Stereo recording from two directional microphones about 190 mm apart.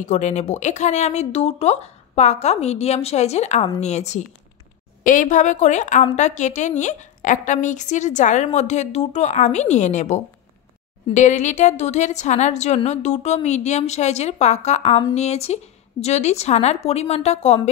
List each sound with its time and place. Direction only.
0.0 s a woman's voice: 40° left (ahead or behind)